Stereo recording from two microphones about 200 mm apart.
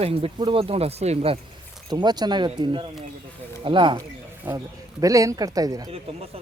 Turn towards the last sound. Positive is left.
turn(degrees=-15)  # may be behind; listen again after turning